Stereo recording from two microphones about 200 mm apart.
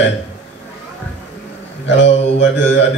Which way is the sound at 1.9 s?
65° left (ahead or behind).